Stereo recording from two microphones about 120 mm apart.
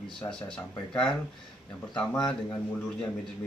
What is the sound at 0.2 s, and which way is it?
Speech, 5° left (ahead or behind).